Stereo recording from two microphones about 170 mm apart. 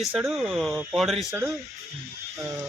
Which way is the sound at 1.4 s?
15° right (ahead or behind).